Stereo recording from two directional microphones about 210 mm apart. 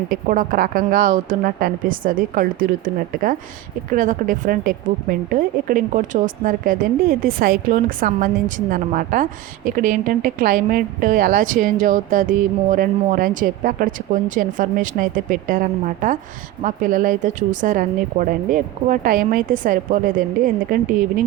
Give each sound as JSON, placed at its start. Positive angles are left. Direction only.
{"t": 0.1, "sound": "a woman's voice", "side_deg": -40}